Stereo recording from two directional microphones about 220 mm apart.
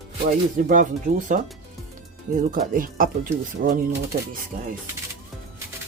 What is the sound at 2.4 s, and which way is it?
Speech, 40° right (ahead or behind).